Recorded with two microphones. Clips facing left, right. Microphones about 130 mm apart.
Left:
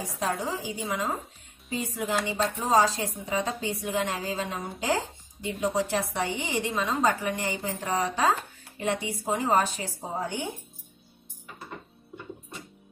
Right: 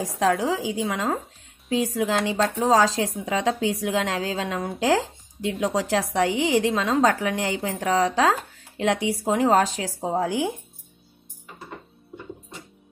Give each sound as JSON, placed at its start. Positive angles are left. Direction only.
{"t": 0.0, "sound": "a woman's voice", "side_deg": -90}